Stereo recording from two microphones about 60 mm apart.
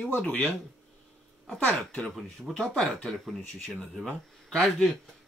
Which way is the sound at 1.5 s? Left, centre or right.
Centre.